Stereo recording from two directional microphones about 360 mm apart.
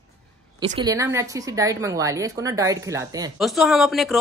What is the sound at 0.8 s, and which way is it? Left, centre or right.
A woman's voice, centre.